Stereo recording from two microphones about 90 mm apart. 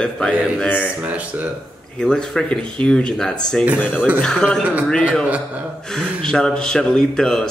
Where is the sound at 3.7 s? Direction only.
20° left (ahead or behind).